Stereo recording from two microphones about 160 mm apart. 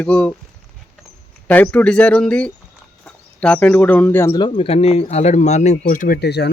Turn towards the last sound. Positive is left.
turn(degrees=90)